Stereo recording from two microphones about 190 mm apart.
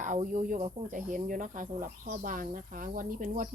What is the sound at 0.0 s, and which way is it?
Speech, 40° right (ahead or behind).